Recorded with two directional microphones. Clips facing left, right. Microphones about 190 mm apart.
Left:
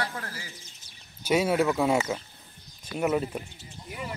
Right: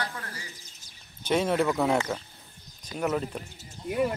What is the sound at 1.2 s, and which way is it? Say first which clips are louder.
Speech: left 1 dB; 5° left (ahead or behind).